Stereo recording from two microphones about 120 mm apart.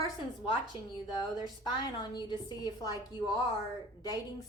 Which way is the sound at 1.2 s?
40° left (ahead or behind).